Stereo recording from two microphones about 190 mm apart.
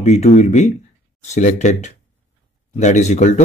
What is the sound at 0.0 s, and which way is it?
Speech, 35° left (ahead or behind).